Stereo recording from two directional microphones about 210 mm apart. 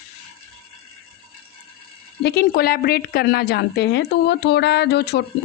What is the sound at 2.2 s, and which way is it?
A woman's voice, 50° left (ahead or behind).